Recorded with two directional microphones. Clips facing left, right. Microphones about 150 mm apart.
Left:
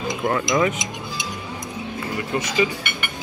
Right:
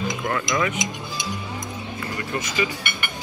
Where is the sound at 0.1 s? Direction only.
25° left (ahead or behind).